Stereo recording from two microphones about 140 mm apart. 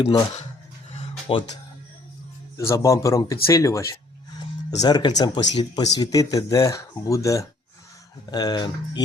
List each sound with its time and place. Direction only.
0.9 s music: 40° left (ahead or behind)
2.6 s speech: 20° left (ahead or behind)